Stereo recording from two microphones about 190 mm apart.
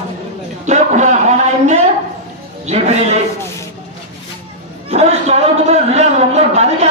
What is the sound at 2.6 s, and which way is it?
Speech, 35° right (ahead or behind).